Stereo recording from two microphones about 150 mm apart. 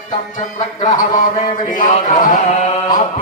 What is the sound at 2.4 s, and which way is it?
Speech, 45° left (ahead or behind).